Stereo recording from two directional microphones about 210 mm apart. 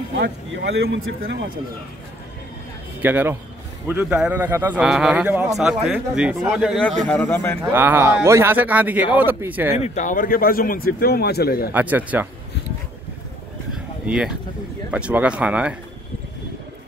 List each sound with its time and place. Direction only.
0.2 s speech: 55° right (ahead or behind)
3.0 s a man's voice: 10° right (ahead or behind); by 7.5 s 10° left (ahead or behind)
7.7 s a man's voice: 10° right (ahead or behind)
9.8 s speech: 35° left (ahead or behind)
11.7 s a man's voice: 10° right (ahead or behind)
14.0 s a man's voice: 5° right (ahead or behind)